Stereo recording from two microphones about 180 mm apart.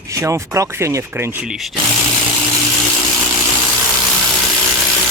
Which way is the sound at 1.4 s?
Centre (ahead or behind).